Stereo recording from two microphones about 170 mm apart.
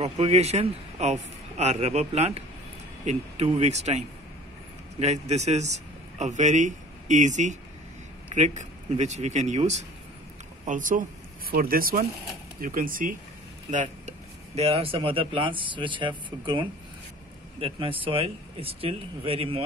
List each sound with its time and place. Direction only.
0.0 s a man's voice: 40° right (ahead or behind)